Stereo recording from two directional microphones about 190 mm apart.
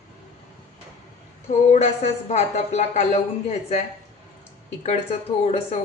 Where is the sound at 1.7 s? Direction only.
35° left (ahead or behind).